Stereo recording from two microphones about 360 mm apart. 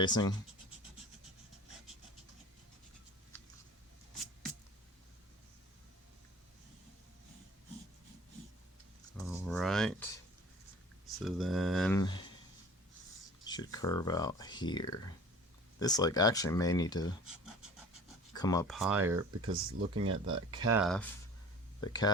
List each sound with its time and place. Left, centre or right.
0.0 s speech: centre
9.3 s a sound: centre
11.2 s speech: centre
13.4 s speech: centre
18.3 s speech: centre
19.5 s speech: right
20.7 s speech: centre